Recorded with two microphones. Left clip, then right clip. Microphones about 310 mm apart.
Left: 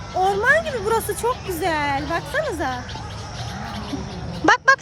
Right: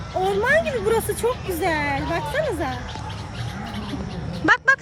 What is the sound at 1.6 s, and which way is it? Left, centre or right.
Speech, centre.